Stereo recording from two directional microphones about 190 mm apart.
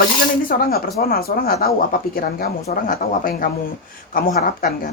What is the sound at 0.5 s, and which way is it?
Speech, 55° left (ahead or behind).